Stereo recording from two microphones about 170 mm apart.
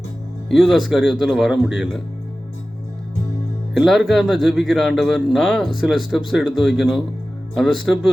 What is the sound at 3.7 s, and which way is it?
Speech, centre (ahead or behind).